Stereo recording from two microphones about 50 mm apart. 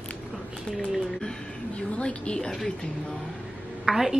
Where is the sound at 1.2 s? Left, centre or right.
Centre.